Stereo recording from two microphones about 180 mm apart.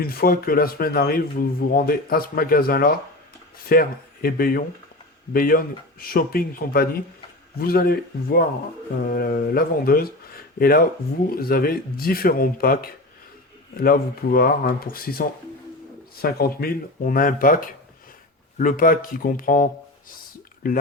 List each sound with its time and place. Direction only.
0.0 s a man's voice: 55° left (ahead or behind)